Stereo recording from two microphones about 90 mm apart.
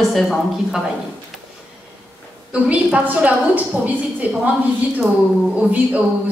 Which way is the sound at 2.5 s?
15° right (ahead or behind).